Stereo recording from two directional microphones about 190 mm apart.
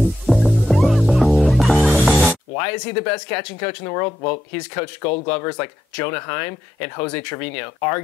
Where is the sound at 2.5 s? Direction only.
10° left (ahead or behind).